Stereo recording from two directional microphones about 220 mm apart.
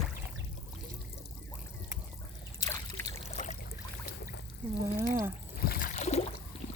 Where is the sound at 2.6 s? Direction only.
15° left (ahead or behind).